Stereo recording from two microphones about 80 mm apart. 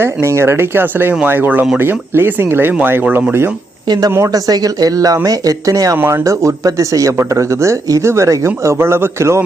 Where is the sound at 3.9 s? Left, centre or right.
Right.